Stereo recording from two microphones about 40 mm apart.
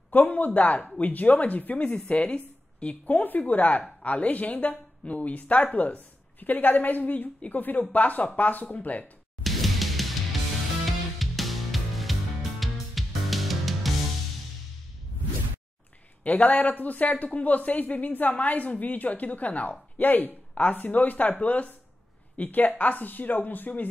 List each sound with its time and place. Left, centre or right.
0.1 s speech: left
0.6 s speech: left
1.9 s a woman's voice: left
3.1 s a woman's voice: left
8.6 s speech: left
9.4 s music: centre
16.3 s speech: left
20.0 s a woman's voice: left